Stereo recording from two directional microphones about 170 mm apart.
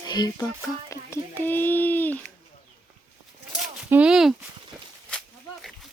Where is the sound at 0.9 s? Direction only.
15° left (ahead or behind).